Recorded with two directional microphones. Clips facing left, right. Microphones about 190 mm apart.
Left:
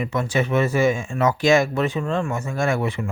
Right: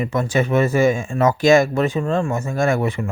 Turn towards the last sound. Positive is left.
turn(degrees=-45)  # may be behind; listen again after turning